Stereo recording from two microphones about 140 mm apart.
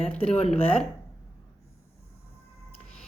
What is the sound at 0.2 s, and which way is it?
Speech, 45° left (ahead or behind).